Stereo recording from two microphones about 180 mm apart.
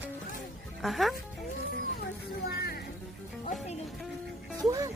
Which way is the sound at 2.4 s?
60° left (ahead or behind).